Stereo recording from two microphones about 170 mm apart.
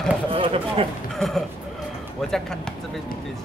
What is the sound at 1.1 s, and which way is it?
Speech, centre (ahead or behind).